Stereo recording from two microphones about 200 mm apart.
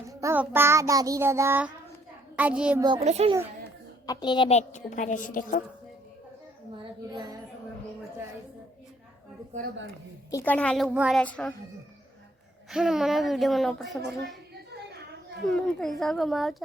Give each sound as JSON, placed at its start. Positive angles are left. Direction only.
{"t": 0.1, "sound": "child singing", "side_deg": -15}
{"t": 2.8, "sound": "a child's voice", "side_deg": -30}
{"t": 4.0, "sound": "a woman's voice", "side_deg": 20}
{"t": 7.1, "sound": "speech", "side_deg": -20}
{"t": 10.3, "sound": "a woman's voice", "side_deg": 10}
{"t": 10.8, "sound": "child singing", "side_deg": -5}
{"t": 11.2, "sound": "a woman's voice", "side_deg": 5}
{"t": 12.7, "sound": "speech", "side_deg": 0}
{"t": 14.7, "sound": "a sound", "side_deg": -55}
{"t": 15.4, "sound": "speech", "side_deg": 5}